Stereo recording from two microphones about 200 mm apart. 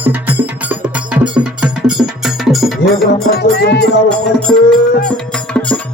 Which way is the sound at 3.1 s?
55° left (ahead or behind).